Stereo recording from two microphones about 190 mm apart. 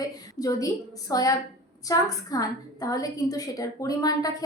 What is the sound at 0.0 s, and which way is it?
A woman's voice, 20° left (ahead or behind).